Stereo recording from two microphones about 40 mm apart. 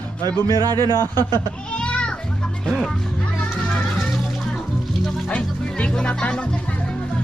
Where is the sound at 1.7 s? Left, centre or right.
Left.